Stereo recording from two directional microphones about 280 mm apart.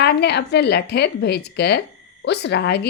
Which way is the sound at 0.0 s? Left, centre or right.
Left.